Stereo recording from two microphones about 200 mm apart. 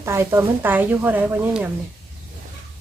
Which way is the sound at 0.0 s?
15° right (ahead or behind).